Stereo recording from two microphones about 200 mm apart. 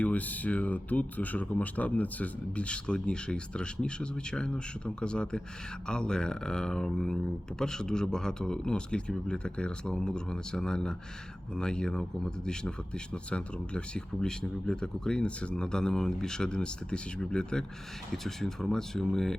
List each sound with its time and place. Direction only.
0.0 s speech: 5° left (ahead or behind)